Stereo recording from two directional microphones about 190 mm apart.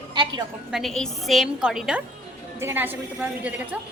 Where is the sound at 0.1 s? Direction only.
25° right (ahead or behind).